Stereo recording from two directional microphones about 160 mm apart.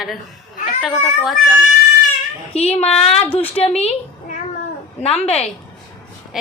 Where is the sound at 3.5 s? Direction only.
40° left (ahead or behind).